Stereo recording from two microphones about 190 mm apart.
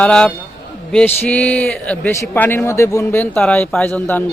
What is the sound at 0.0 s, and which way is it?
A man's voice, 5° left (ahead or behind).